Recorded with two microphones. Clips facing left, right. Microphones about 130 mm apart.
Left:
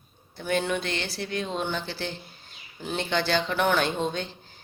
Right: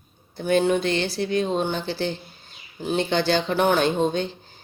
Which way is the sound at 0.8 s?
20° right (ahead or behind).